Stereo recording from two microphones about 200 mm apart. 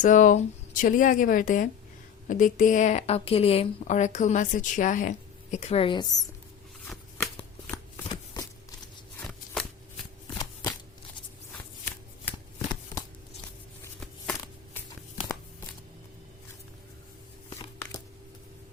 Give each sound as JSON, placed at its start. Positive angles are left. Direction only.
{"t": 0.0, "sound": "a woman's voice", "side_deg": 40}
{"t": 6.8, "sound": "shuffling cards", "side_deg": 10}
{"t": 7.3, "sound": "shuffling cards", "side_deg": 25}
{"t": 10.3, "sound": "shuffling cards", "side_deg": 20}